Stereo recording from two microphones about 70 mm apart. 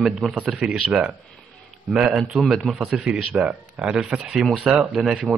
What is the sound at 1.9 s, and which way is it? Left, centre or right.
A man's voice, centre.